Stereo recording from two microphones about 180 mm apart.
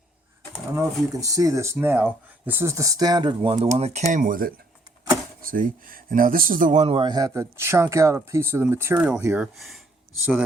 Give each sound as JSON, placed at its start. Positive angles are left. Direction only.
{"t": 0.5, "sound": "speech", "side_deg": -15}
{"t": 9.6, "sound": "speech", "side_deg": 0}